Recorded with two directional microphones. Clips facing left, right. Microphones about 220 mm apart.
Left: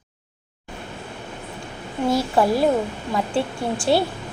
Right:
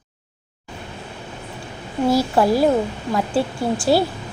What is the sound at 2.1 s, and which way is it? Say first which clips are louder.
Speech: right 2 dB; centre (ahead or behind).